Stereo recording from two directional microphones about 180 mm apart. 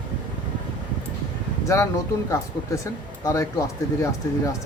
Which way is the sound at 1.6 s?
15° left (ahead or behind).